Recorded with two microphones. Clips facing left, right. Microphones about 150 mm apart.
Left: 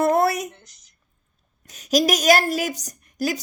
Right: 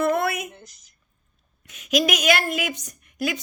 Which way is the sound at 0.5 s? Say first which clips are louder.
Right 5 dB; 10° right (ahead or behind).